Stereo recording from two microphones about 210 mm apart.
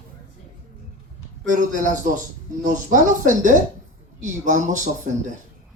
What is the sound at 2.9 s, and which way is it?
Speech, 40° right (ahead or behind).